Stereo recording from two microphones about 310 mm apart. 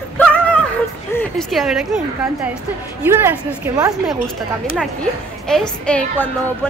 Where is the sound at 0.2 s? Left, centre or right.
Centre.